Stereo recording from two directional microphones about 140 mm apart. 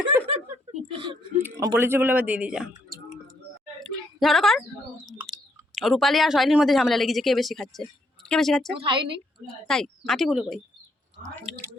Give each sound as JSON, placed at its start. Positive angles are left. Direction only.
{"t": 0.3, "sound": "chuckle", "side_deg": -50}
{"t": 1.4, "sound": "speech", "side_deg": -15}
{"t": 3.8, "sound": "a sound", "side_deg": 0}
{"t": 5.7, "sound": "speech", "side_deg": 0}
{"t": 8.8, "sound": "a woman's voice", "side_deg": -35}
{"t": 9.5, "sound": "speech", "side_deg": 5}